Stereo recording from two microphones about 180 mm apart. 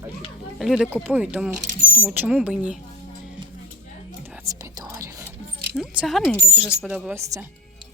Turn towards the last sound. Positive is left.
turn(degrees=-15)  # may be behind; listen again after turning